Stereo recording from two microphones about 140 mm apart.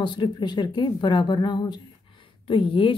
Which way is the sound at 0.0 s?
35° left (ahead or behind).